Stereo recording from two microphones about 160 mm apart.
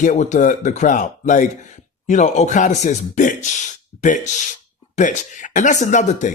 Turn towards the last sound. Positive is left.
turn(degrees=50)  # may be behind; listen again after turning